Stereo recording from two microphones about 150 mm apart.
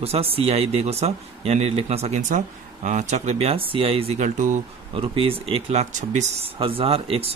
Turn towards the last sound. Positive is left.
turn(degrees=-40)  # may be behind; listen again after turning